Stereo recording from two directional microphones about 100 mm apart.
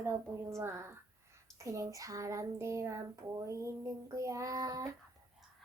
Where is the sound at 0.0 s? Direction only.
25° right (ahead or behind).